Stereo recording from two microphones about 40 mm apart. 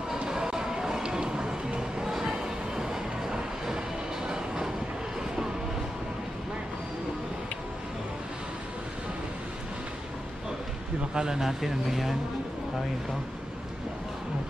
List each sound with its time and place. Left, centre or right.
0.2 s a sound: centre
1.0 s music: centre
11.1 s speech: centre